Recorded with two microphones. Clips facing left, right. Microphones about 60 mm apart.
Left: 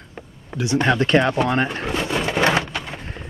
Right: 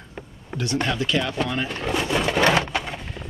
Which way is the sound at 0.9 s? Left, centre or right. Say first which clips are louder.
Left 7 dB; left.